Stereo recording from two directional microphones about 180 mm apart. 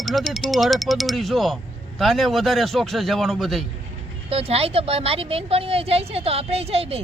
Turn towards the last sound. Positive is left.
turn(degrees=-35)  # may be behind; listen again after turning